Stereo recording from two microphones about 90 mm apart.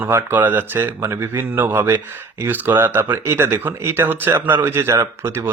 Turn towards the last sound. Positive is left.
turn(degrees=-30)  # may be behind; listen again after turning